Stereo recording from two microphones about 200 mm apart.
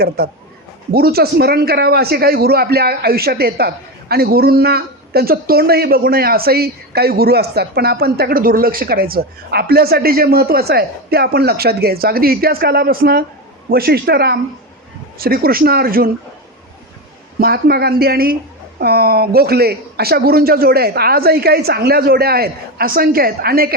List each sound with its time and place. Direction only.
0.2 s speech: 50° right (ahead or behind)
17.4 s speech: 50° right (ahead or behind)